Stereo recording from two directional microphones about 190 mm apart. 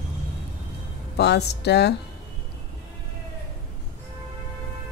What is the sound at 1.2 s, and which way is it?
Speech, 60° left (ahead or behind).